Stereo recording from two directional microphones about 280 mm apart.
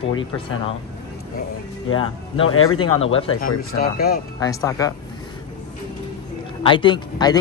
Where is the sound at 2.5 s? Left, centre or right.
Left.